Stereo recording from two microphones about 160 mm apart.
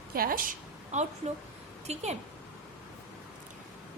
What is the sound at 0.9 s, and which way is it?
A woman's voice, 45° right (ahead or behind).